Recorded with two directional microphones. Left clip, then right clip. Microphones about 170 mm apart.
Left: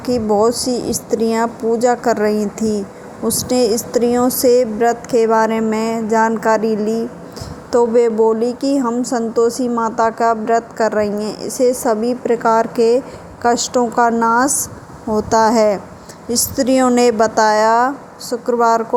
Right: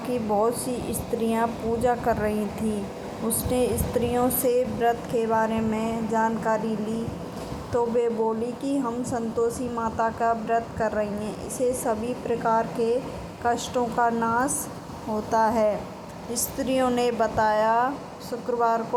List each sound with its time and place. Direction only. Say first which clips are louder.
0.1 s a woman's voice: left 10 dB; 80° left; by 2.3 s 65° left (ahead or behind)
3.5 s a woman's voice: left 9 dB; 85° left; by 18.8 s 65° left (ahead or behind)